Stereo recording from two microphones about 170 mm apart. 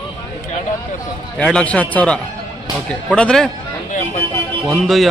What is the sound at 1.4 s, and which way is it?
Speech, 5° left (ahead or behind).